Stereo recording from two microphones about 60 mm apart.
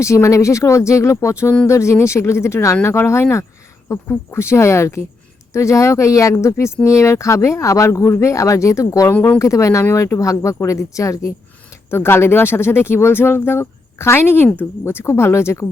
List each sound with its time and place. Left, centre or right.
0.0 s speech: left
11.9 s speech: left